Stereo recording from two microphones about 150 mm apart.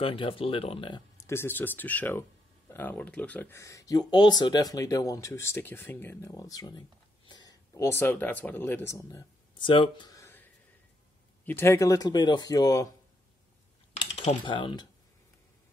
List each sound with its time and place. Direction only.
0.0 s speech: 35° left (ahead or behind)
1.2 s speech: 15° left (ahead or behind)
9.6 s speech: 35° left (ahead or behind)
11.4 s speech: 15° left (ahead or behind)
14.1 s speech: 35° left (ahead or behind)